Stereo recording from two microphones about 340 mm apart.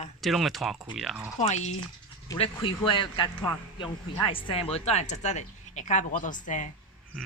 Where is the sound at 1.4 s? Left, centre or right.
Centre.